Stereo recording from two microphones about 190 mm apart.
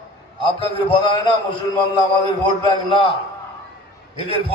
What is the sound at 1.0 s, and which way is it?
Speech, 25° left (ahead or behind).